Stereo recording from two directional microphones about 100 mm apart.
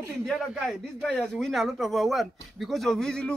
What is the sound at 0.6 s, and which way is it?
Speech, 5° left (ahead or behind).